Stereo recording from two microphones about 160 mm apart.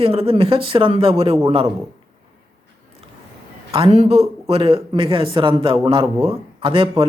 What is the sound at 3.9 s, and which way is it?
Speech, 40° right (ahead or behind).